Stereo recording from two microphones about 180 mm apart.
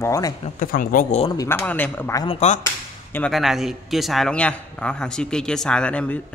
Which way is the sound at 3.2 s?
Centre (ahead or behind).